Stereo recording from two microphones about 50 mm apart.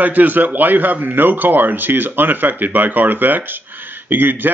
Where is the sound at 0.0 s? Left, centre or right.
Right.